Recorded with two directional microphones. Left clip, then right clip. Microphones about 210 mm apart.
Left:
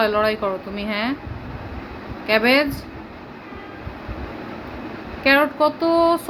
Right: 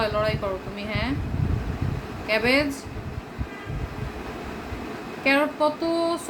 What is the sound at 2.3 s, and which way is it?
Speech, 25° left (ahead or behind).